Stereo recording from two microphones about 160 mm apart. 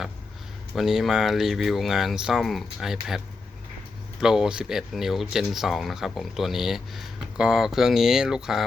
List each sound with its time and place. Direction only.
0.8 s speech: centre (ahead or behind)
4.2 s speech: 5° right (ahead or behind)